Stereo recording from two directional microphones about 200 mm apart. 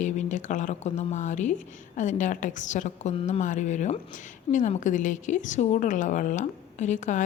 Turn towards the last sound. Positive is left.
turn(degrees=40)  # may be behind; listen again after turning